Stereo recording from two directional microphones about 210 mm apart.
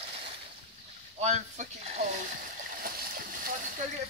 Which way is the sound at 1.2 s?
30° right (ahead or behind).